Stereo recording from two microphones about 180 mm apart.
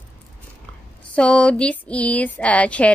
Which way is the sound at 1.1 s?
5° left (ahead or behind).